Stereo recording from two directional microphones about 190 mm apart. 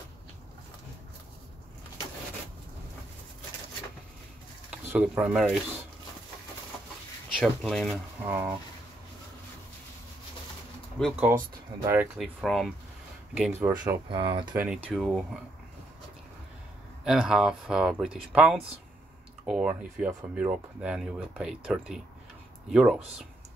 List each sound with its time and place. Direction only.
4.6 s speech: 5° right (ahead or behind)
7.3 s speech: 5° left (ahead or behind)
8.3 s speech: 10° right (ahead or behind)
11.0 s speech: 5° left (ahead or behind)
11.3 s speech: 20° right (ahead or behind)
12.0 s speech: 5° right (ahead or behind)
13.5 s speech: 15° right (ahead or behind)
14.0 s speech: 25° right (ahead or behind)
14.5 s speech: 5° right (ahead or behind)
17.0 s speech: 5° right (ahead or behind)